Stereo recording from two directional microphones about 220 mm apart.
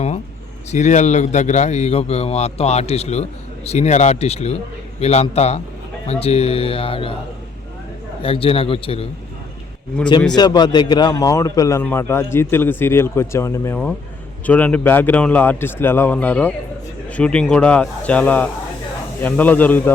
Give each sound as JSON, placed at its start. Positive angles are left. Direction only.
{"t": 0.7, "sound": "a man's voice", "side_deg": 30}
{"t": 8.2, "sound": "a man's voice", "side_deg": 25}
{"t": 10.3, "sound": "a man's voice", "side_deg": 20}